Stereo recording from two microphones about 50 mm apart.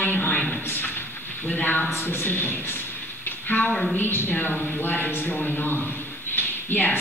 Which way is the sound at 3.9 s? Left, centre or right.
Left.